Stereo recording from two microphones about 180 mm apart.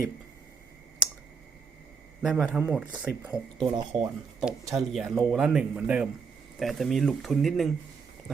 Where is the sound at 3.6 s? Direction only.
25° right (ahead or behind).